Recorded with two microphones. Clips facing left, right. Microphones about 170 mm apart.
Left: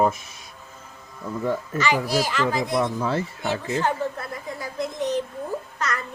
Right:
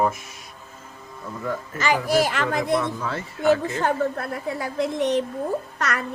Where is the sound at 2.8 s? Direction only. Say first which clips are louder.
Left 4 dB; 25° left (ahead or behind).